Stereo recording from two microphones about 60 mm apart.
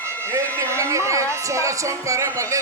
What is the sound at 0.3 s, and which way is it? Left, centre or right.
Speech, right.